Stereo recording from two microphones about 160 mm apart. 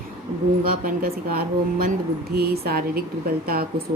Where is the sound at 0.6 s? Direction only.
65° right (ahead or behind).